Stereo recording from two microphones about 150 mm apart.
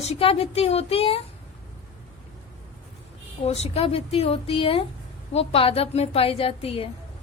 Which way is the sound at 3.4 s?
45° left (ahead or behind).